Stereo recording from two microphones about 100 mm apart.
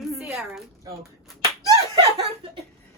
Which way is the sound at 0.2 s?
5° right (ahead or behind).